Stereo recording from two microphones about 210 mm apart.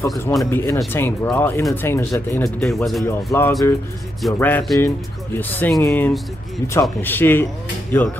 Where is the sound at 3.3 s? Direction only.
15° left (ahead or behind).